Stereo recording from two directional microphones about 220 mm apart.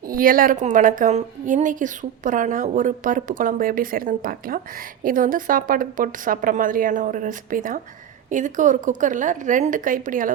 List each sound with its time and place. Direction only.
0.1 s a woman's voice: 40° right (ahead or behind)